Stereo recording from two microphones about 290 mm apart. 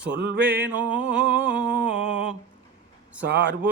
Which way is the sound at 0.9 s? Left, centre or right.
Right.